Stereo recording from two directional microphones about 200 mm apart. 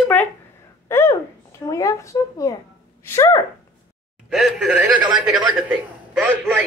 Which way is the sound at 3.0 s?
15° left (ahead or behind).